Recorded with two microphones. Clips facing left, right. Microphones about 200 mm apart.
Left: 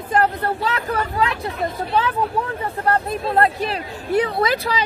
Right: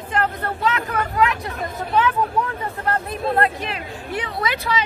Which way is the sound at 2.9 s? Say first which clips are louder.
Left 2 dB; 35° left (ahead or behind).